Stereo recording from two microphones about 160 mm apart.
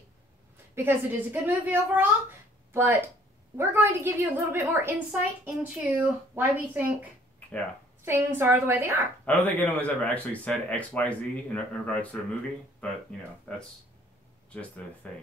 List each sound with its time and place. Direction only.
0.7 s a woman's voice: 15° right (ahead or behind)
9.2 s speech: 10° left (ahead or behind)
13.5 s speech: 5° left (ahead or behind)
15.0 s speech: 5° left (ahead or behind)